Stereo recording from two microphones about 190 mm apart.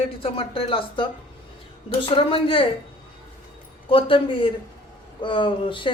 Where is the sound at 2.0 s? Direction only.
30° left (ahead or behind).